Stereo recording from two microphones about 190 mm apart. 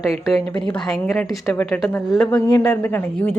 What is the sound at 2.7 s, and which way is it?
Speech, 10° left (ahead or behind).